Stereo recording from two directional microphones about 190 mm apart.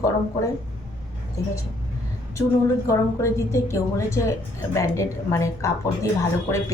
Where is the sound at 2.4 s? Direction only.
15° left (ahead or behind).